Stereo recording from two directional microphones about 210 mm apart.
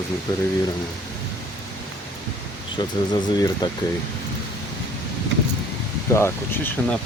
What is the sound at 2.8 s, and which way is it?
Speech, 20° left (ahead or behind).